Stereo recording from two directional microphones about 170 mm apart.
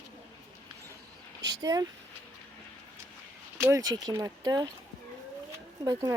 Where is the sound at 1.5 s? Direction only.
20° right (ahead or behind).